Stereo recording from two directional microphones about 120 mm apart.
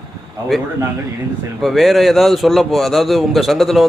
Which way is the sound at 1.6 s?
Centre (ahead or behind).